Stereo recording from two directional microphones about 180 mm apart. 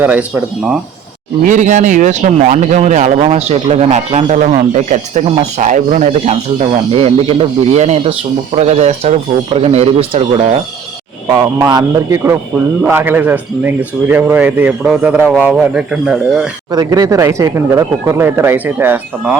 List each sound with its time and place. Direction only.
0.0 s a man's voice: 10° right (ahead or behind)
1.5 s speech: 45° right (ahead or behind)
11.3 s a man's voice: 20° right (ahead or behind); by 16.5 s 5° right (ahead or behind)
16.7 s a man's voice: 20° right (ahead or behind)